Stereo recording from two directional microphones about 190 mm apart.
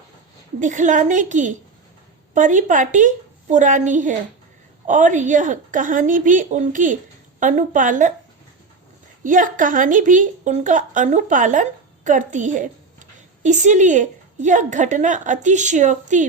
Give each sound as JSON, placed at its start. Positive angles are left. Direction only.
{"t": 0.6, "sound": "a woman's voice", "side_deg": -40}
{"t": 9.2, "sound": "a woman's voice", "side_deg": -45}